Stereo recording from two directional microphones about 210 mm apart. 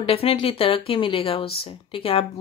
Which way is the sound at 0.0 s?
25° left (ahead or behind).